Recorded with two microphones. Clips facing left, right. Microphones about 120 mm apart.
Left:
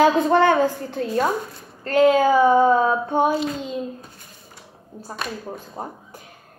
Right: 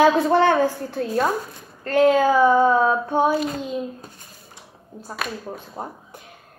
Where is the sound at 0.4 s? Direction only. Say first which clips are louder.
Even; 15° left (ahead or behind).